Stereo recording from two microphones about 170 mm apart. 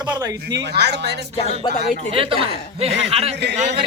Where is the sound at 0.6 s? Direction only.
80° right.